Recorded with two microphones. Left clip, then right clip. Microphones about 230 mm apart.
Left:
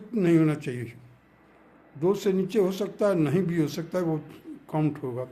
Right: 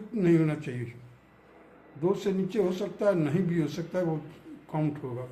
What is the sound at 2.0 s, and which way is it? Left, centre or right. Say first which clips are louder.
Speech: left 4 dB; left.